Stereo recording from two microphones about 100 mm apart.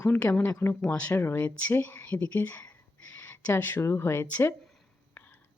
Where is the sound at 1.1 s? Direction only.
20° left (ahead or behind).